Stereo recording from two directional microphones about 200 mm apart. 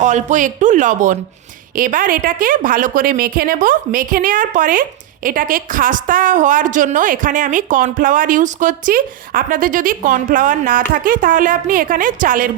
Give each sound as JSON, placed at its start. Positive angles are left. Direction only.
{"t": 0.0, "sound": "a woman's voice", "side_deg": -35}